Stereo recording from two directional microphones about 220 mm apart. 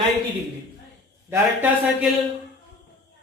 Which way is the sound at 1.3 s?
10° right (ahead or behind).